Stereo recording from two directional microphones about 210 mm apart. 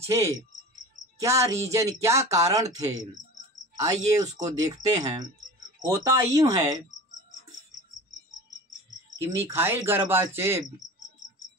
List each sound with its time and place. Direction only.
0.0 s speech: 15° right (ahead or behind)
5.9 s speech: 15° right (ahead or behind)
9.2 s speech: 10° right (ahead or behind)